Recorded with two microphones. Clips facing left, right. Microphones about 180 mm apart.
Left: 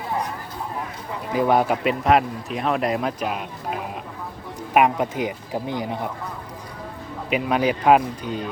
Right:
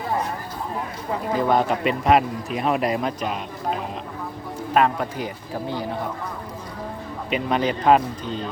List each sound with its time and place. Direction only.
1.3 s speech: 10° left (ahead or behind)
4.7 s speech: 15° left (ahead or behind)
7.3 s speech: 5° left (ahead or behind)